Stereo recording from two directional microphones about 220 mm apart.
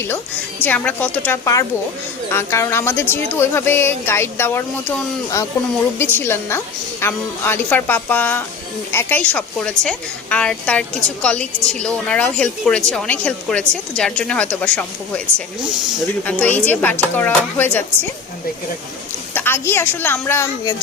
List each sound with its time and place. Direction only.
0.6 s a woman's voice: 10° left (ahead or behind)
16.2 s speech: 5° left (ahead or behind)
19.3 s speech: 10° left (ahead or behind)